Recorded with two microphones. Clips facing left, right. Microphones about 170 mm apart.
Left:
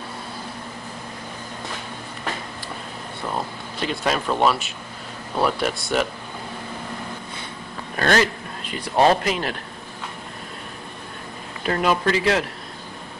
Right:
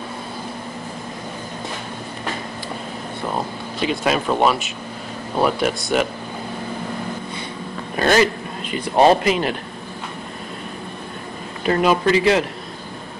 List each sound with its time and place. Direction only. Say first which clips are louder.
3.3 s speech: right 2 dB; 15° right (ahead or behind)
5.6 s a man's voice: right 3 dB; centre (ahead or behind)
7.9 s a man's voice: right 3 dB; 10° right (ahead or behind)
8.9 s speech: right 3 dB; 25° right (ahead or behind)
9.2 s a man's voice: right 5 dB; 5° right (ahead or behind)
11.6 s a man's voice: right 4 dB; 5° right (ahead or behind)